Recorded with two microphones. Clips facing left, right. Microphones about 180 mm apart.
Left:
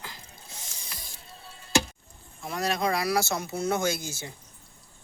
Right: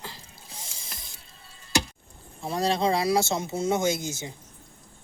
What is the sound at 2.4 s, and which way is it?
Speech, 30° right (ahead or behind).